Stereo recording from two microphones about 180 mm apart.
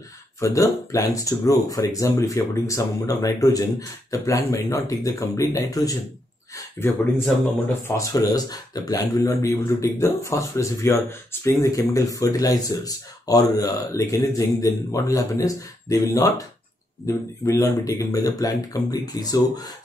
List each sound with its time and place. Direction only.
0.4 s speech: 15° left (ahead or behind)
6.8 s speech: 40° right (ahead or behind)
7.6 s speech: 15° left (ahead or behind)